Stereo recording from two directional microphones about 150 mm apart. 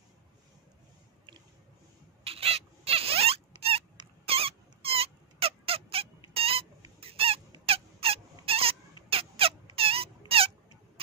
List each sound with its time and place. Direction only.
2.2 s rodents: 40° right (ahead or behind)
4.3 s a sound: 40° right (ahead or behind)
7.0 s fowl: 40° right (ahead or behind)
7.6 s rodents: 40° right (ahead or behind)